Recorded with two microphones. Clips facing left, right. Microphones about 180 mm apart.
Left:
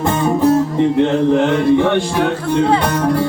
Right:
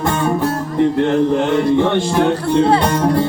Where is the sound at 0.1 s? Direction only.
15° left (ahead or behind).